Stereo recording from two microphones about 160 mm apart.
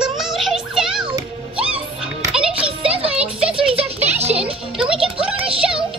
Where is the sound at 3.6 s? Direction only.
35° right (ahead or behind).